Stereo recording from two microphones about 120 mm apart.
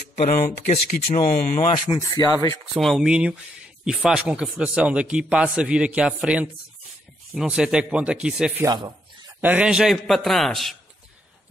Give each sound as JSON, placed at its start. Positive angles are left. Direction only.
{"t": 0.1, "sound": "speech", "side_deg": 70}
{"t": 2.0, "sound": "speech", "side_deg": 30}
{"t": 2.7, "sound": "a man's voice", "side_deg": 0}